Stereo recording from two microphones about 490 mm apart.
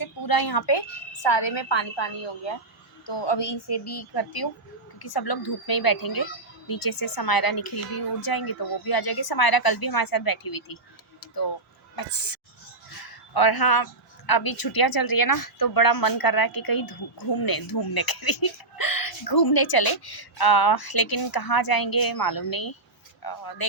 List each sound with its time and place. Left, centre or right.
0.0 s a woman's voice: left
11.9 s a woman's voice: left